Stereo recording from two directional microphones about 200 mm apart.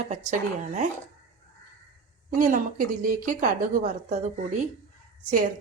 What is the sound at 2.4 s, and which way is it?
A woman's voice, 40° right (ahead or behind).